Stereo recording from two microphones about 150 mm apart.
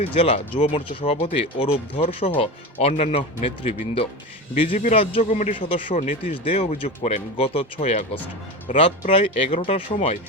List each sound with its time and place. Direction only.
0.0 s speech: 40° left (ahead or behind)
4.7 s speech: 60° left (ahead or behind)
5.5 s speech: 35° left (ahead or behind)
5.9 s speech: 55° left (ahead or behind)
6.2 s speech: 35° left (ahead or behind)
7.3 s speech: 40° left (ahead or behind)
7.8 s speech: 55° left (ahead or behind)
8.6 s speech: 35° left (ahead or behind)